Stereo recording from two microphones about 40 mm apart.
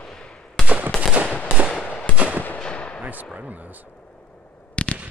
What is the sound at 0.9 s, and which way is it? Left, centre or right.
Fireworks, left.